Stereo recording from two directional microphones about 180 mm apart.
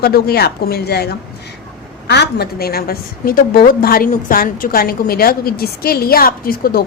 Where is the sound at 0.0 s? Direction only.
60° left (ahead or behind).